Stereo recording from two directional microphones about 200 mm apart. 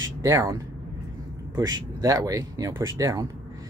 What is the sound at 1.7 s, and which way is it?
Speech, 20° right (ahead or behind).